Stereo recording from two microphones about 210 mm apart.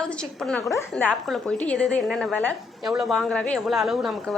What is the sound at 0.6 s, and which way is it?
Speech, 15° left (ahead or behind).